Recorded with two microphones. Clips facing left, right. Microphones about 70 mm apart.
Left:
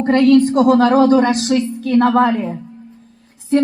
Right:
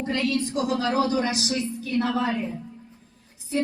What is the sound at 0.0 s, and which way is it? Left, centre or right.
Speech, left.